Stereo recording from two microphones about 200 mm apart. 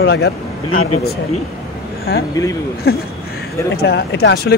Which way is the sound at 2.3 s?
15° left (ahead or behind).